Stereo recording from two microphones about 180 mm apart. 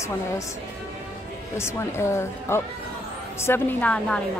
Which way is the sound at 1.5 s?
15° left (ahead or behind).